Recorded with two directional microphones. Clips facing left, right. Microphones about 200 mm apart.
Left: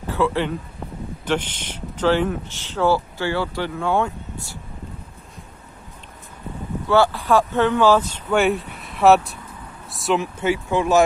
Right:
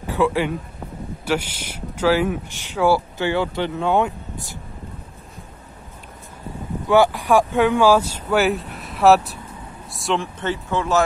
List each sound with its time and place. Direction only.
0.0 s a sound: 15° right (ahead or behind)
1.2 s speech: 10° right (ahead or behind)
6.9 s speech: 15° right (ahead or behind); by 11.1 s 15° left (ahead or behind)